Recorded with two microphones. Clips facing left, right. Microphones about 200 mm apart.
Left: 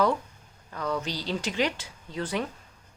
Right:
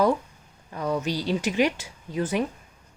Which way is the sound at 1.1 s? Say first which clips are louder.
Right 5 dB; 15° right (ahead or behind).